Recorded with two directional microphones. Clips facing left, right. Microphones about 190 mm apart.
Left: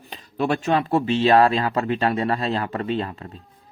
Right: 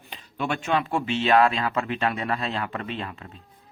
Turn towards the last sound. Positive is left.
turn(degrees=35)  # may be behind; listen again after turning